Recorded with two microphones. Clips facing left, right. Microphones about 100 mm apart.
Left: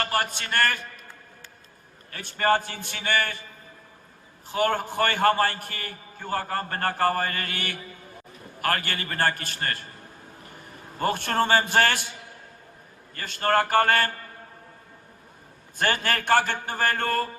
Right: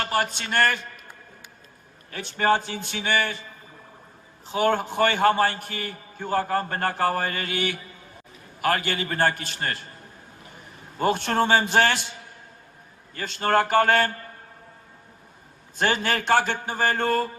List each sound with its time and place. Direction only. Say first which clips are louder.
0.0 s a man's voice: right 1 dB; 50° left (ahead or behind)
2.0 s a man's voice: right 1 dB; 50° left (ahead or behind)
4.5 s a man's voice: right 2 dB; 50° left (ahead or behind)
10.9 s a man's voice: right 2 dB; 45° left (ahead or behind)
13.1 s a man's voice: right 1 dB; 50° left (ahead or behind)
16.0 s a man's voice: left 1 dB; 50° left (ahead or behind)